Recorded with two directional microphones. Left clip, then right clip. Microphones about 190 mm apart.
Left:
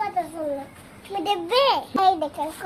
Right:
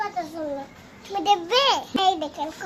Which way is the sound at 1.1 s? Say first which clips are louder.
Right 2 dB; centre (ahead or behind).